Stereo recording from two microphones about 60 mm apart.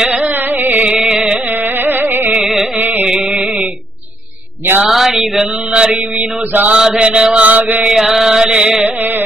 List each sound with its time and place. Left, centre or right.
0.2 s carnatic music: right
0.9 s carnatic music: centre
1.3 s carnatic music: right
2.3 s carnatic music: centre
2.8 s carnatic music: right
3.1 s mantra: centre
4.8 s mantra: centre; by 6.7 s right
6.7 s mantra: centre
7.9 s mantra: centre